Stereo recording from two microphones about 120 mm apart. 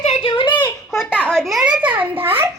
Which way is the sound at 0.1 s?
45° left (ahead or behind).